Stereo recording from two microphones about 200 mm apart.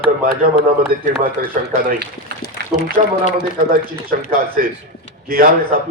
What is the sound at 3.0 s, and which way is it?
Speech, 40° right (ahead or behind).